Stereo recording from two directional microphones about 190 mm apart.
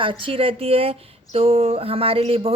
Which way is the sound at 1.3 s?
35° right (ahead or behind).